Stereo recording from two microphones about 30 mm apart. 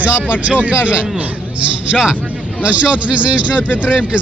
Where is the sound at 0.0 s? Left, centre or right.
Right.